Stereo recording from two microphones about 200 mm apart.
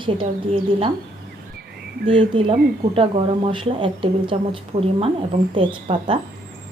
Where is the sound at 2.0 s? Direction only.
25° right (ahead or behind).